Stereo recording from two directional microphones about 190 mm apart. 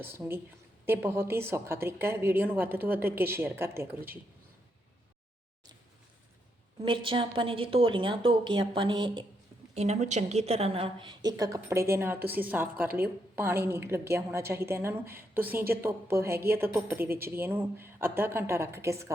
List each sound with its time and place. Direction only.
0.0 s a woman's voice: 10° right (ahead or behind)
6.8 s a woman's voice: 25° right (ahead or behind)